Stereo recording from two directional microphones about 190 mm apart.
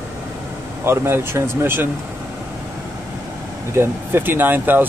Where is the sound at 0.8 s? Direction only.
15° right (ahead or behind).